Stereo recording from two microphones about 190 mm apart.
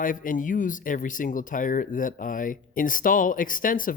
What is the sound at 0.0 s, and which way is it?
Speech, 45° left (ahead or behind).